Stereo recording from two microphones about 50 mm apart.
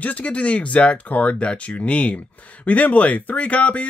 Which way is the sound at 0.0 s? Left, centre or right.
Left.